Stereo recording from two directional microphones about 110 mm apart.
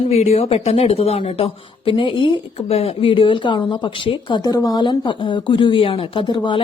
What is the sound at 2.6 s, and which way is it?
A woman's voice, 65° left (ahead or behind).